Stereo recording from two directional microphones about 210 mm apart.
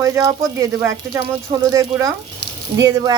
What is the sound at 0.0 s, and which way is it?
Speech, 15° right (ahead or behind).